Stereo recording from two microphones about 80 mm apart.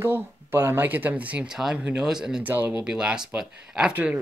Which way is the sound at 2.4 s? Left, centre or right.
Right.